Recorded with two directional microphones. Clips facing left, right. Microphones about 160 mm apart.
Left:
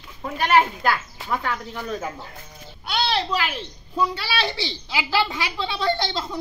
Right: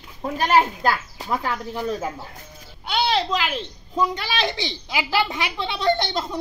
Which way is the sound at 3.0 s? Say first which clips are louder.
Right 2 dB; 15° right (ahead or behind).